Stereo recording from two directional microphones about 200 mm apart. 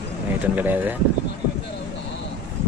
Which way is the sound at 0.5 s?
10° right (ahead or behind).